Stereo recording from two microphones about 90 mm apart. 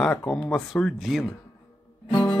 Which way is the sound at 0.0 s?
10° left (ahead or behind).